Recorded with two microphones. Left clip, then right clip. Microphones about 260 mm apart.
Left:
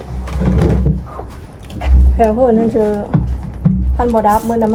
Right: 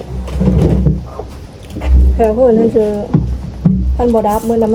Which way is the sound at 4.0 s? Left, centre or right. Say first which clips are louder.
Left 1 dB; left.